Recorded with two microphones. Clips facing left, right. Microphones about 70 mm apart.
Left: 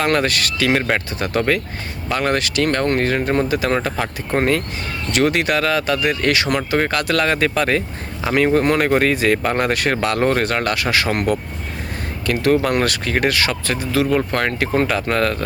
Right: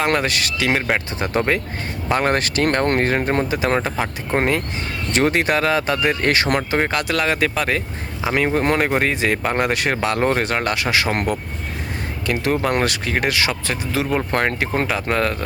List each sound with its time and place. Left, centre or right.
0.0 s speech: centre
0.8 s speech: centre
1.2 s speech: right
3.8 s speech: centre
5.1 s speech: right
6.7 s speech: centre
12.2 s speech: centre